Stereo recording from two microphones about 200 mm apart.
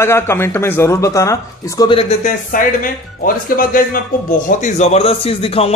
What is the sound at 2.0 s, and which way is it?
A man's voice, 35° left (ahead or behind).